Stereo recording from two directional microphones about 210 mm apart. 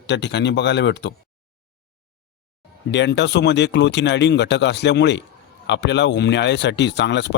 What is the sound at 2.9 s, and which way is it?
Speech, 55° left (ahead or behind).